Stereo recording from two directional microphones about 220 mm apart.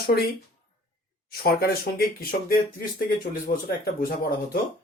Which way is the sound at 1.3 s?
45° left (ahead or behind).